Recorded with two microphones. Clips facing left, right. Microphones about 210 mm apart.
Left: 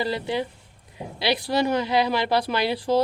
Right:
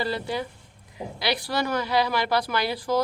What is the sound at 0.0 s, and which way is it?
Speech, 20° left (ahead or behind).